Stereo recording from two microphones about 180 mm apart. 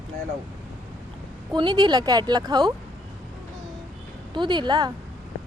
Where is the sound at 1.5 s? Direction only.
25° right (ahead or behind).